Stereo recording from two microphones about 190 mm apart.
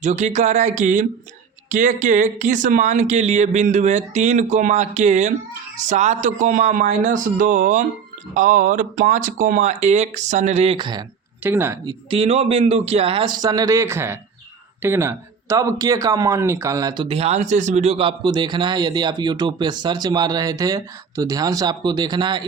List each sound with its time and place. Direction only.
0.0 s speech: 35° right (ahead or behind)
11.4 s speech: 10° right (ahead or behind)
11.9 s speech: 30° right (ahead or behind)